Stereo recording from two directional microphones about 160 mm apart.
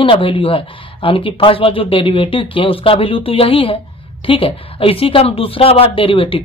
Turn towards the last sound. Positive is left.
turn(degrees=35)  # may be behind; listen again after turning